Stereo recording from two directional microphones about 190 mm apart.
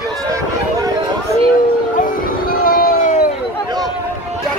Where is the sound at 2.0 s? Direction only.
50° left (ahead or behind).